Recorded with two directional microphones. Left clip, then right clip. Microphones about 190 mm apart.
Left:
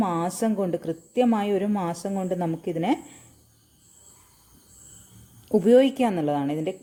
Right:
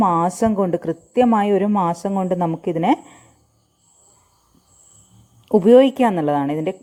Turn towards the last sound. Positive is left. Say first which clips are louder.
# right 6 dB
turn(degrees=-20)  # may be behind; listen again after turning